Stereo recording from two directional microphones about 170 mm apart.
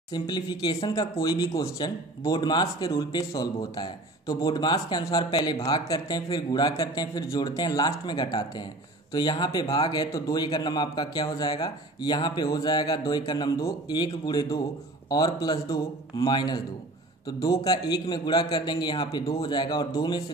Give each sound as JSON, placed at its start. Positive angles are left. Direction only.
{"t": 0.1, "sound": "speech", "side_deg": 25}